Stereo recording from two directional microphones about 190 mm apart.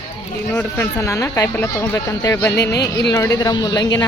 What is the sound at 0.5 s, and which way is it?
Speech, 10° left (ahead or behind).